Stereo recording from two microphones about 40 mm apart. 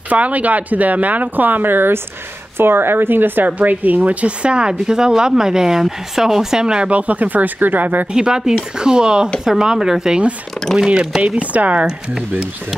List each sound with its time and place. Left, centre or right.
0.1 s speech: right
2.5 s a woman's voice: right
3.4 s speech: right
4.5 s a woman's voice: right
6.9 s speech: right
8.1 s a woman's voice: centre
11.2 s speech: right